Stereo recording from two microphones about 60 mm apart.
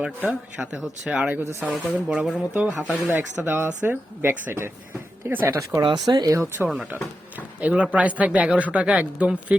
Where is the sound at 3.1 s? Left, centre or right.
Right.